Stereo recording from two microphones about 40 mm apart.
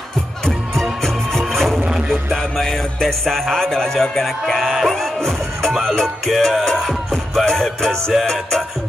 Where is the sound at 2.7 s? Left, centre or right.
Centre.